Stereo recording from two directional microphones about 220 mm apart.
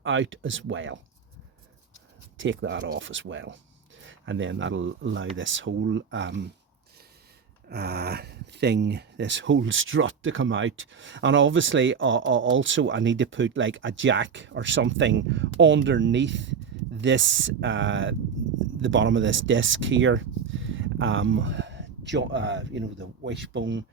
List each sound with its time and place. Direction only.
0.0 s speech: 60° right (ahead or behind)
2.4 s speech: 60° right (ahead or behind)
7.7 s speech: 45° right (ahead or behind)